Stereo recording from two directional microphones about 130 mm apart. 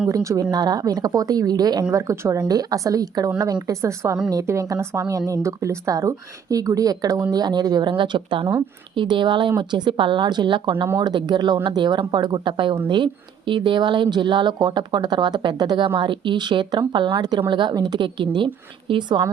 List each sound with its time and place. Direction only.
0.1 s a woman's voice: 25° right (ahead or behind)